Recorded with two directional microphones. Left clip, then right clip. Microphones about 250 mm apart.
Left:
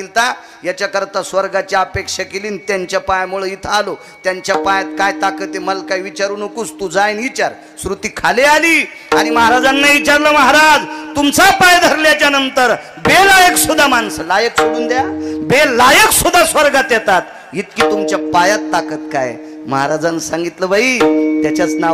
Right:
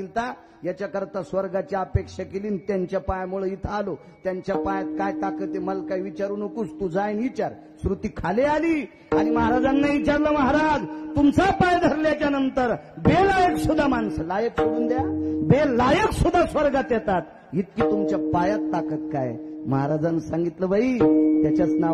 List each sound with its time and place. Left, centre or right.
0.2 s speech: centre
8.2 s speech: centre